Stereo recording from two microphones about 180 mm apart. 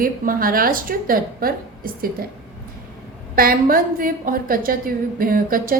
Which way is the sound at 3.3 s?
50° right (ahead or behind).